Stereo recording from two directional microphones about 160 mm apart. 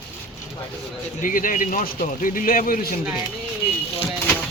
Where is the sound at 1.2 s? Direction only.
55° left (ahead or behind).